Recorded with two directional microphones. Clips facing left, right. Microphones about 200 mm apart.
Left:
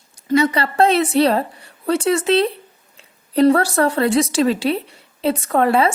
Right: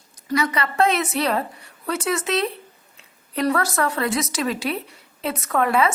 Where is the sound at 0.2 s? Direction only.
25° left (ahead or behind).